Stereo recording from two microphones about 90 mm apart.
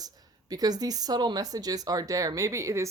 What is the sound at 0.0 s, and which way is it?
Speech, 45° right (ahead or behind).